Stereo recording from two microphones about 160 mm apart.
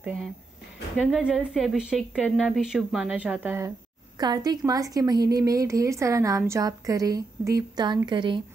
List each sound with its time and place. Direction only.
0.0 s a woman's voice: 5° right (ahead or behind)
4.2 s a woman's voice: 25° right (ahead or behind)